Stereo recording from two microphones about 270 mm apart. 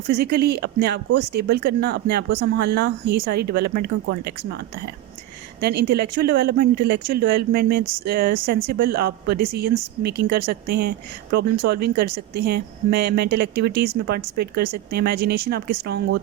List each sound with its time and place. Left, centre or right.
0.1 s speech: right
5.5 s speech: right